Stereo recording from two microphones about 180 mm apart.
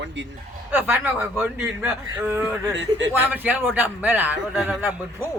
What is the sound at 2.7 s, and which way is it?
Speech, 90° right.